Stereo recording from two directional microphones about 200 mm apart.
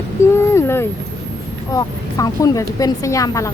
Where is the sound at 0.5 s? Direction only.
10° left (ahead or behind).